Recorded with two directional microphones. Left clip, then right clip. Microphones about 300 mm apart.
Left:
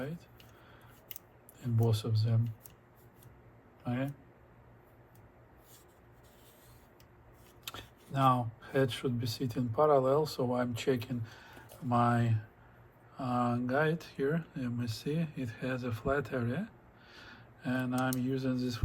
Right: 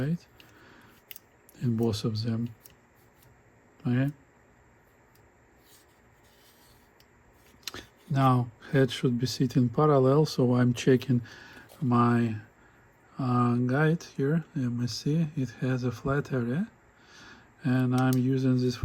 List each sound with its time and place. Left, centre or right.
1.5 s speech: right
3.8 s speech: right
7.6 s speech: right